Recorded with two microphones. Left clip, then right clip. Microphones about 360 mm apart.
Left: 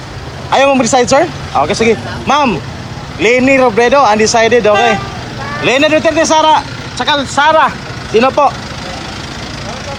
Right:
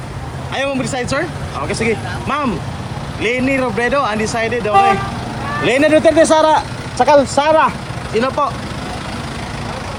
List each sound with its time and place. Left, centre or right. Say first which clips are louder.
0.5 s a man's voice: left 11 dB; centre